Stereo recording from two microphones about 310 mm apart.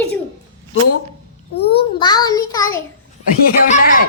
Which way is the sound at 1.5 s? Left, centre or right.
Centre.